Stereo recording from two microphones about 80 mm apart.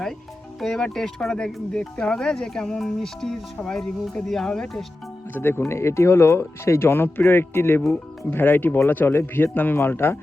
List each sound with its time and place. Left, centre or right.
0.6 s speech: centre
5.3 s speech: left